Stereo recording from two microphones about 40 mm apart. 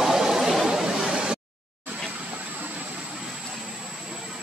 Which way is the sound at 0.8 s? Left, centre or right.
Centre.